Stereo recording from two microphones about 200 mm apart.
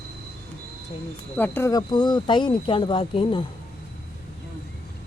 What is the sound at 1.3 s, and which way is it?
Speech, 10° left (ahead or behind).